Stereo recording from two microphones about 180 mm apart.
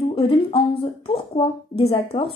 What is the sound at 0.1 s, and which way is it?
A woman's voice, 30° left (ahead or behind).